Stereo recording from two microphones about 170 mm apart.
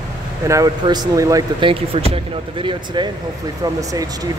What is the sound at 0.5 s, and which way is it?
Speech, 20° right (ahead or behind).